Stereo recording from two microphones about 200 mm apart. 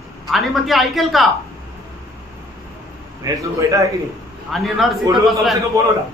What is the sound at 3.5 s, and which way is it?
Speech, 15° right (ahead or behind).